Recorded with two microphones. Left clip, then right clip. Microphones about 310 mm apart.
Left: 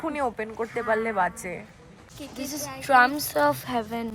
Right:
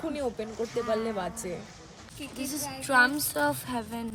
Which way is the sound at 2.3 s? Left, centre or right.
Left.